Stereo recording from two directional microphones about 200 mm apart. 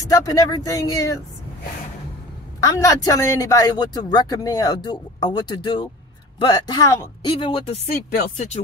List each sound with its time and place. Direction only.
0.1 s speech: 15° left (ahead or behind)
2.6 s speech: 15° left (ahead or behind)